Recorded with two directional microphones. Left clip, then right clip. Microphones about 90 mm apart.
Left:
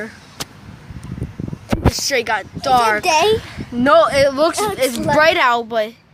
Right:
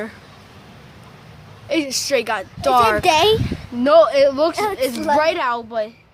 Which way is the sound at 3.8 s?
Centre (ahead or behind).